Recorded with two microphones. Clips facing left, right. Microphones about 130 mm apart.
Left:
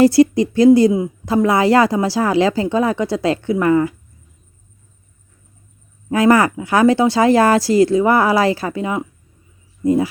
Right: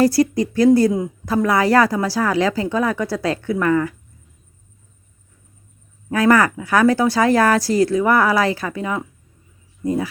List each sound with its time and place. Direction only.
0.0 s speech: 25° left (ahead or behind)
6.1 s speech: 25° left (ahead or behind)